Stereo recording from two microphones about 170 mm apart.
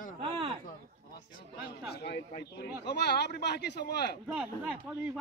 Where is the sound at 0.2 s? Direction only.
35° right (ahead or behind).